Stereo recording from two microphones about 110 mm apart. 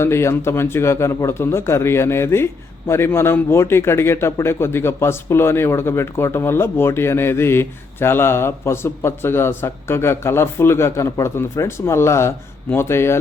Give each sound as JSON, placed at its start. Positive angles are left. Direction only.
{"t": 0.0, "sound": "a man's voice", "side_deg": 25}